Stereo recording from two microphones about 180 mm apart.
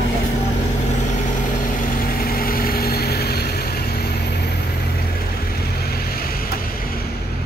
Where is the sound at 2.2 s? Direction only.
55° left (ahead or behind).